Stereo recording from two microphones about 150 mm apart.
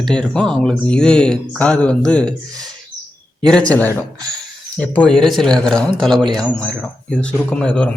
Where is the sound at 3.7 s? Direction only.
15° left (ahead or behind).